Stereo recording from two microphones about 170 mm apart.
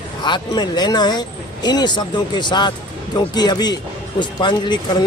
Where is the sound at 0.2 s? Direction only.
25° left (ahead or behind).